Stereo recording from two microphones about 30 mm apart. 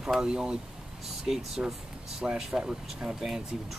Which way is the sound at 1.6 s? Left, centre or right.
Right.